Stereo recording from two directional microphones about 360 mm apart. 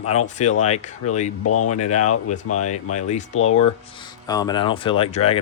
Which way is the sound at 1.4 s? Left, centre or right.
Left.